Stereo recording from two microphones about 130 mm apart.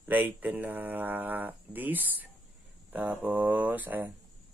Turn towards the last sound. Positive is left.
turn(degrees=-15)  # may be behind; listen again after turning